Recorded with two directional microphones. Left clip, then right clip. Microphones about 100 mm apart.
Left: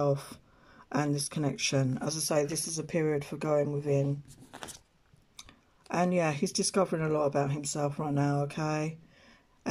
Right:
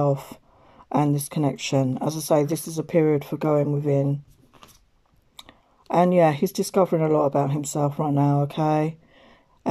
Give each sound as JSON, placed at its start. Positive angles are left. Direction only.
{"t": 0.0, "sound": "speech", "side_deg": -35}
{"t": 5.3, "sound": "speech", "side_deg": -40}